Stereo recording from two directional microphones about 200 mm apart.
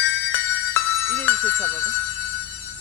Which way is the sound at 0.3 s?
10° left (ahead or behind).